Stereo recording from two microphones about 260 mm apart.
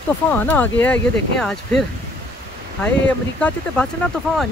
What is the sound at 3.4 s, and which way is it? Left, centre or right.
Speech, centre.